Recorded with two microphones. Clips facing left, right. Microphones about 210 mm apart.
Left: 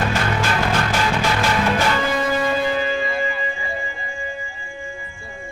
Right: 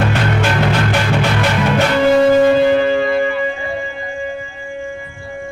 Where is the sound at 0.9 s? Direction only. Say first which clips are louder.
Right 4 dB; 65° right (ahead or behind).